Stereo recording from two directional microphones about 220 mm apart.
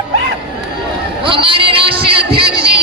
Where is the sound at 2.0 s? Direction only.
25° right (ahead or behind).